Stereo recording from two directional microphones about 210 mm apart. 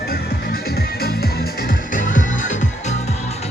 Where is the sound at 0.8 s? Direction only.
45° left (ahead or behind).